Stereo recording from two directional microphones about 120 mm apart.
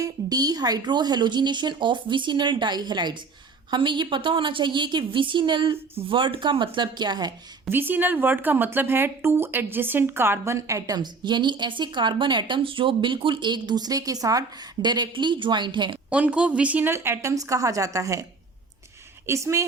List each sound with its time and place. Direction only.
0.0 s speech: 30° right (ahead or behind)
7.7 s speech: 15° right (ahead or behind); by 16.0 s 40° right (ahead or behind)
16.0 s a woman's voice: 10° right (ahead or behind)